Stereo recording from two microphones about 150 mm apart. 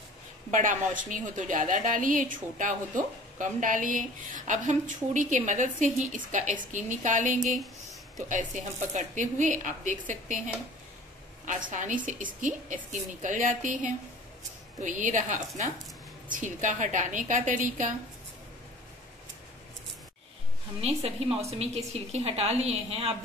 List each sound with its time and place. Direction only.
0.5 s a woman's voice: 60° right (ahead or behind)
20.8 s a woman's voice: 45° right (ahead or behind)